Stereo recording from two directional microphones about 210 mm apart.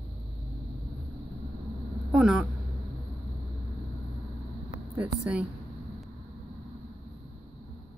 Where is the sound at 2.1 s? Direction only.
5° right (ahead or behind).